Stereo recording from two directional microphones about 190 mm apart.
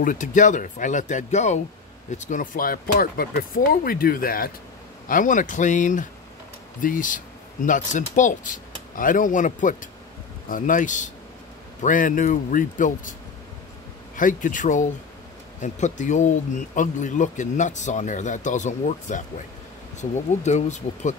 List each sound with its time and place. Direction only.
0.0 s speech: 45° left (ahead or behind)
14.1 s speech: 45° left (ahead or behind)